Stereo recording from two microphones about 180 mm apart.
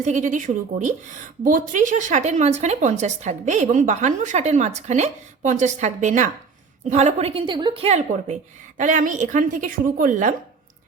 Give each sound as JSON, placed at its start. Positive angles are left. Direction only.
{"t": 0.0, "sound": "a woman's voice", "side_deg": -45}